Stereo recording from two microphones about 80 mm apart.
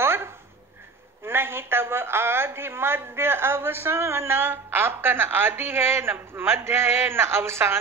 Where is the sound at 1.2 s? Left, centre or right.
Right.